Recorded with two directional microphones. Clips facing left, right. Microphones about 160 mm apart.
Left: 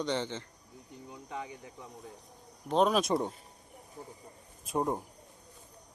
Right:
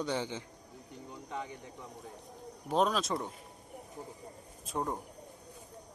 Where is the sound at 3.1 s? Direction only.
25° left (ahead or behind).